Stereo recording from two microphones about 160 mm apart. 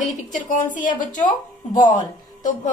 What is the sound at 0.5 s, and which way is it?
Speech, 55° left (ahead or behind).